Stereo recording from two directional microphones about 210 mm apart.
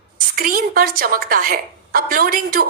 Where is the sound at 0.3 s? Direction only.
45° right (ahead or behind).